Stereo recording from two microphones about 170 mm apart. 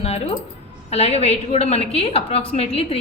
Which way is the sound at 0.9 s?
40° left (ahead or behind).